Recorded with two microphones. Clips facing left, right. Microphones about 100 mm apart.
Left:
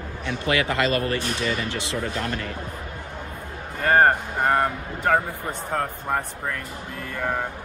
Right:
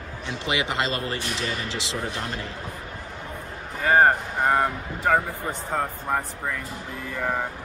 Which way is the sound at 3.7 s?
5° right (ahead or behind).